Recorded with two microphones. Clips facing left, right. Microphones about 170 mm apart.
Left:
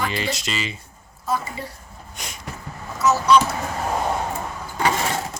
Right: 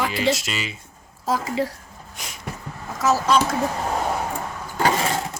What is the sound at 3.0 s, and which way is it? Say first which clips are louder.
Speech: left 1 dB; 90° right.